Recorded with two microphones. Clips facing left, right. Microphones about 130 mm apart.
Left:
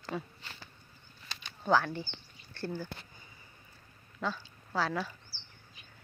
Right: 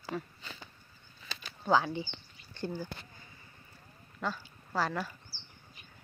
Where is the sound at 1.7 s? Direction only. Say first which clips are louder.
Even; 15° right (ahead or behind).